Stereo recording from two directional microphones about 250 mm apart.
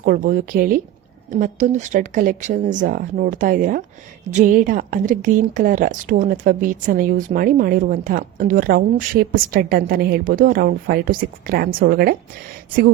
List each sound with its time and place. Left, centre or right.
0.0 s a woman's voice: right